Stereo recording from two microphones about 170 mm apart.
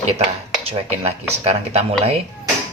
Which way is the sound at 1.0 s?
40° right (ahead or behind).